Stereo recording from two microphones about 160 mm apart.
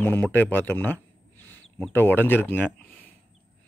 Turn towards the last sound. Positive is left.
turn(degrees=10)  # may be behind; listen again after turning